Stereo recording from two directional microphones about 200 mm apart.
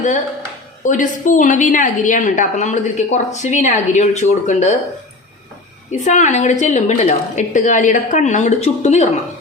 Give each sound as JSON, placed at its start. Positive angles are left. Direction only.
{"t": 0.9, "sound": "a woman's voice", "side_deg": 40}
{"t": 5.9, "sound": "a woman's voice", "side_deg": 35}